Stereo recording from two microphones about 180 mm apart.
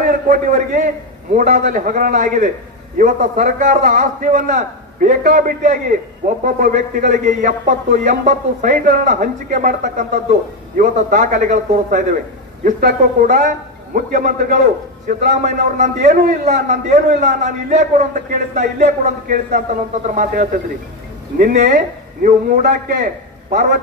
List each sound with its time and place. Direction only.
0.0 s a man's voice: 45° right (ahead or behind)